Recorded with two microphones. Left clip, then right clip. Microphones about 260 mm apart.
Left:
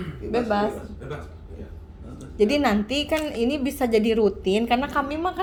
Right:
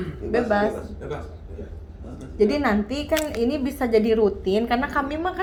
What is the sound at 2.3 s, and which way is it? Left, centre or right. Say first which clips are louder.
A woman's voice: even; left.